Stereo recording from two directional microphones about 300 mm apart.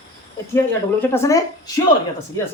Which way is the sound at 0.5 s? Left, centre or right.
Centre.